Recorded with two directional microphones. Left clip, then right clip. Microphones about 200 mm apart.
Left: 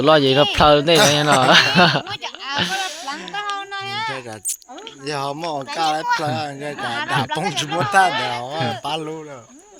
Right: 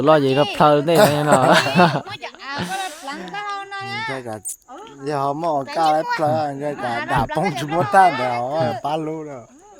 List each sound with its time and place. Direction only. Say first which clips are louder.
0.0 s speech: left 1 dB; 10° right (ahead or behind)
2.0 s speech: left 3 dB; 60° right (ahead or behind)
2.8 s a sound: left 2 dB; 60° right (ahead or behind)
5.0 s speech: right 4 dB; 55° right (ahead or behind)